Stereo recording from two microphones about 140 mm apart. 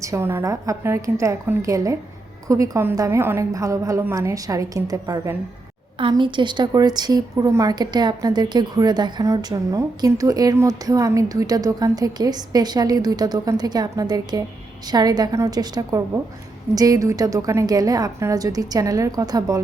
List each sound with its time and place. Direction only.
0.0 s a woman's voice: 20° right (ahead or behind)